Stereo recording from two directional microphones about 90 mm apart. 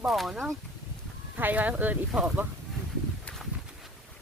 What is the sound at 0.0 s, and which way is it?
Speech, 5° right (ahead or behind).